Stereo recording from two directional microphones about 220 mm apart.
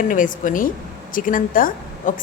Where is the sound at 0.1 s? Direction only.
35° left (ahead or behind).